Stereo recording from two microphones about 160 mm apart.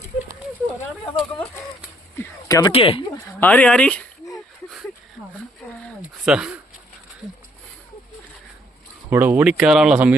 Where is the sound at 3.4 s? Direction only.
5° left (ahead or behind).